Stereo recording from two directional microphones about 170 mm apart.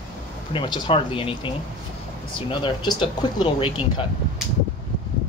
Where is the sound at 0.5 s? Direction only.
30° left (ahead or behind).